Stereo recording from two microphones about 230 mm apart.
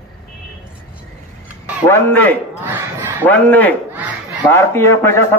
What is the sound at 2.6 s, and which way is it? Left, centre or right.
Battle cry, centre.